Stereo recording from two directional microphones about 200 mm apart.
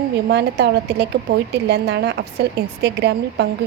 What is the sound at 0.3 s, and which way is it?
Speech, 55° right (ahead or behind).